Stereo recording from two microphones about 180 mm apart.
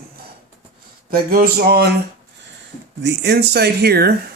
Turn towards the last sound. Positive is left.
turn(degrees=-60)  # may be behind; listen again after turning